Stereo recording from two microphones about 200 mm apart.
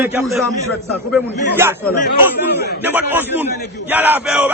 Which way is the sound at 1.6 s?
10° right (ahead or behind).